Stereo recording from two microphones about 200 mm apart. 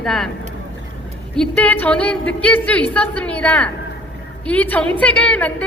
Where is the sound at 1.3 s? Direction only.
5° left (ahead or behind).